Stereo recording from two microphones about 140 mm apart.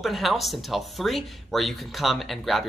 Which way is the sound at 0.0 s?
Centre (ahead or behind).